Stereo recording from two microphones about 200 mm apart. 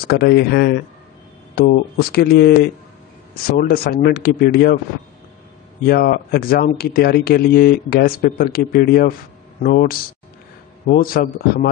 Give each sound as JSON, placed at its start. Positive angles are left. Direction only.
{"t": 0.0, "sound": "speech", "side_deg": 50}
{"t": 5.9, "sound": "speech", "side_deg": 50}